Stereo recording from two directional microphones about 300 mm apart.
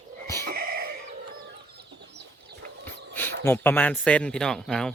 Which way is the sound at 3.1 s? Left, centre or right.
Centre.